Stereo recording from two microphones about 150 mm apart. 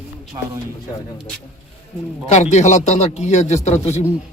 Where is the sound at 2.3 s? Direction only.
50° left (ahead or behind).